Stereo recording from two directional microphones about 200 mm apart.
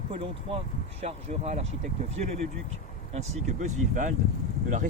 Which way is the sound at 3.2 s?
40° right (ahead or behind).